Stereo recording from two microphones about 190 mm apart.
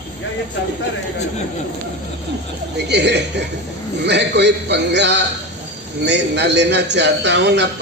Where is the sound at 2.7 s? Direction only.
60° right (ahead or behind).